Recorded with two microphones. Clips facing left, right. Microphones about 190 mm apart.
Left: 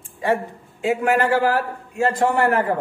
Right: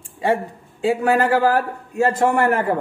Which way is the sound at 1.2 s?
40° right (ahead or behind).